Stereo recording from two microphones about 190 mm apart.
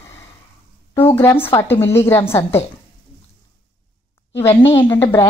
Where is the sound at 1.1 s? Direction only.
10° left (ahead or behind).